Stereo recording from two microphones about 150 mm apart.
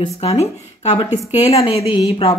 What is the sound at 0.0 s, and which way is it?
A woman's voice, 40° left (ahead or behind).